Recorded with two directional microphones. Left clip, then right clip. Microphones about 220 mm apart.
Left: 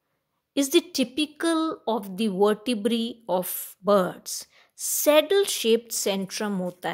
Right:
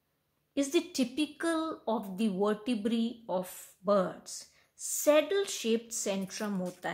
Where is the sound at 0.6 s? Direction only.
45° left (ahead or behind).